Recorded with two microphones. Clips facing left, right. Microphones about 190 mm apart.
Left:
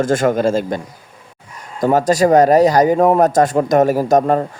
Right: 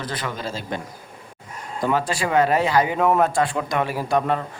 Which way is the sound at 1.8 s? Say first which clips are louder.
Left 9 dB; 40° left (ahead or behind).